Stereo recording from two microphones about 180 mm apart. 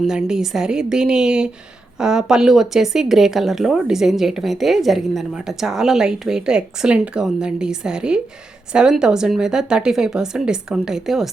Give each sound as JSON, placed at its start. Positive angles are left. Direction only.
{"t": 0.0, "sound": "speech", "side_deg": -5}